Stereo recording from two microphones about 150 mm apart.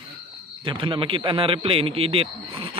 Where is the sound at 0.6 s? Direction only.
35° right (ahead or behind).